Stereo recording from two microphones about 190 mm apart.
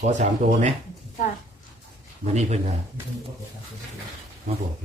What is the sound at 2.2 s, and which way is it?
Speech, 35° right (ahead or behind).